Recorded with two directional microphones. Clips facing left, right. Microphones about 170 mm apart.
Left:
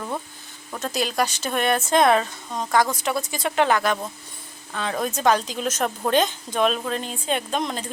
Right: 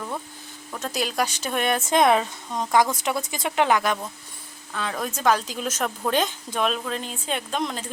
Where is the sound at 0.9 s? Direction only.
10° right (ahead or behind).